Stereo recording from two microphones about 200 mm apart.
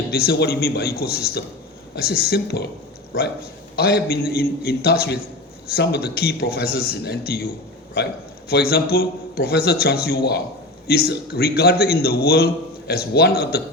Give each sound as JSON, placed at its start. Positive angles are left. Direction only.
{"t": 0.1, "sound": "a man's voice", "side_deg": 50}
{"t": 3.8, "sound": "a man's voice", "side_deg": 50}